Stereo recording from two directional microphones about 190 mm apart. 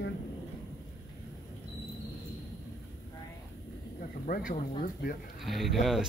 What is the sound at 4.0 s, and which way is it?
Speech, 50° left (ahead or behind).